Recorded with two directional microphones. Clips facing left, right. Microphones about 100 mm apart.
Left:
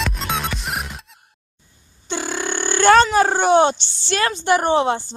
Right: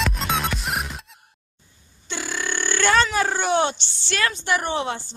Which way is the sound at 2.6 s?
45° left (ahead or behind).